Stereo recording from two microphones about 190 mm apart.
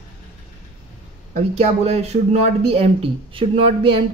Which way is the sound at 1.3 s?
35° right (ahead or behind).